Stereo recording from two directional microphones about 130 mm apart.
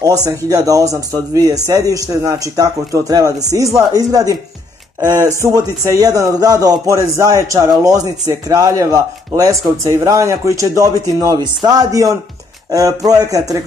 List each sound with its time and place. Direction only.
0.2 s a man's voice: 30° right (ahead or behind)